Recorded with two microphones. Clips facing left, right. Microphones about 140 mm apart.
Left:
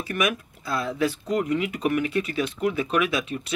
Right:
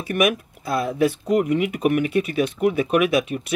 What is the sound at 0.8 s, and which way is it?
Speech, 55° right (ahead or behind).